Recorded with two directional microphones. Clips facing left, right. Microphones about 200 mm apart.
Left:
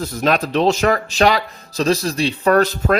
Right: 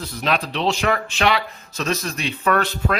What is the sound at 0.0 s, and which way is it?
Speech, 45° left (ahead or behind).